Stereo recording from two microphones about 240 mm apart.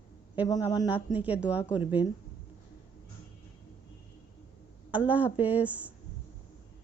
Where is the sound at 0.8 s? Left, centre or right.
Centre.